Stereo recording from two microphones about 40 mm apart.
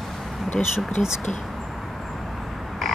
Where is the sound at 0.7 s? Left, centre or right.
Centre.